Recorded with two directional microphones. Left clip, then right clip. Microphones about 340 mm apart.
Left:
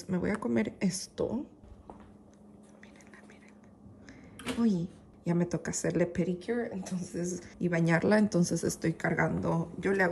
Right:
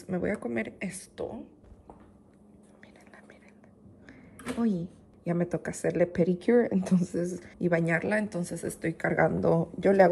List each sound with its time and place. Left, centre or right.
0.0 s speech: centre
4.4 s speech: centre
6.4 s speech: right
7.1 s speech: centre